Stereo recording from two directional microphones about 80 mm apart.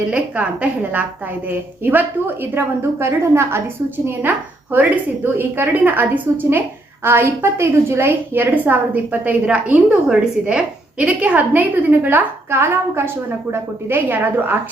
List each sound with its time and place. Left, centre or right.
0.1 s a woman's voice: centre